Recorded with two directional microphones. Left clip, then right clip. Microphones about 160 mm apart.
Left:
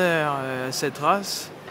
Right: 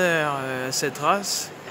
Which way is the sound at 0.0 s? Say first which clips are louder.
Even; 15° left (ahead or behind).